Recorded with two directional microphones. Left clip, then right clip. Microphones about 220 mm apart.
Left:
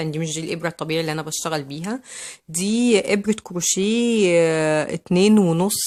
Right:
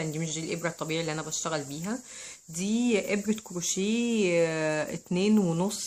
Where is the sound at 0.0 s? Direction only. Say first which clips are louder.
Left 7 dB; 40° left (ahead or behind).